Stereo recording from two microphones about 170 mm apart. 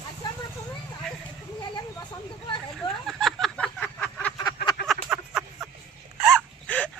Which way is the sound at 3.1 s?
Centre (ahead or behind).